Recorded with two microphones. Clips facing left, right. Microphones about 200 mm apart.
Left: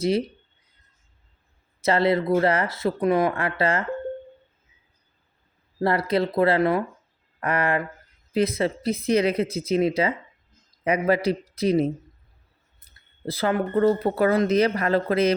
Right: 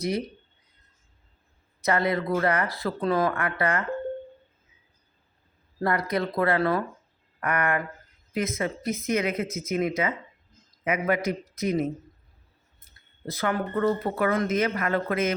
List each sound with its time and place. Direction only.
1.8 s speech: 30° left (ahead or behind)
5.8 s speech: 30° left (ahead or behind)
7.4 s speech: 30° left (ahead or behind)
13.2 s speech: 30° left (ahead or behind)